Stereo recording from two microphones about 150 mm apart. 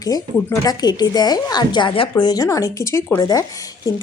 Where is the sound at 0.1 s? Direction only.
25° left (ahead or behind).